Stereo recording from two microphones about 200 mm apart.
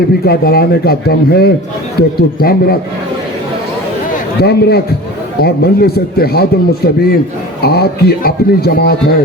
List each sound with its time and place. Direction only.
0.3 s speech: 50° left (ahead or behind)
4.4 s speech: 55° left (ahead or behind)